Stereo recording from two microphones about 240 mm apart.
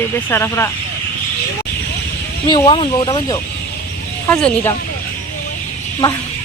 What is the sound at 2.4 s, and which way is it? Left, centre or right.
Speech, centre.